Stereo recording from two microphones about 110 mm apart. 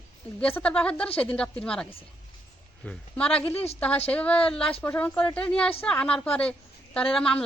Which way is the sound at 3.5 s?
70° left (ahead or behind).